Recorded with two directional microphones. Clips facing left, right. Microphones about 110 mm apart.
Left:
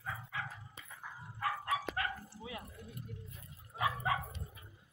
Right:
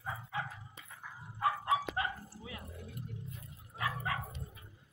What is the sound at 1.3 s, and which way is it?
Bow-wow, 20° right (ahead or behind).